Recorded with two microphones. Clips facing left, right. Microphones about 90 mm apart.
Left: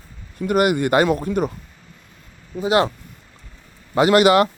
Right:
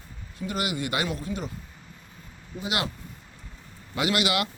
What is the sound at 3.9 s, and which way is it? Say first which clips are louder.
Speech: left 12 dB; 40° left (ahead or behind).